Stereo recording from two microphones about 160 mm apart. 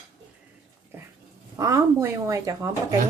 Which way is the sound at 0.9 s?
15° right (ahead or behind).